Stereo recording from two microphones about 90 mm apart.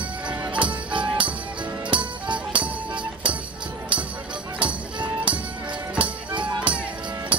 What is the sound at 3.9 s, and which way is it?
Music, 65° right (ahead or behind).